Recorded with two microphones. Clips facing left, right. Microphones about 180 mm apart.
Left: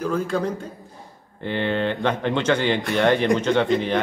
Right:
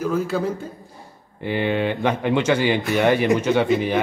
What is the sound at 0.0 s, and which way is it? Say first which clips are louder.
A man's voice: right 1 dB; 5° right (ahead or behind).